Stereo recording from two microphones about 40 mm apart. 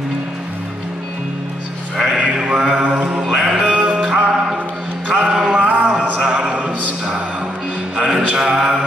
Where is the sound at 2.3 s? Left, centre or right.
Centre.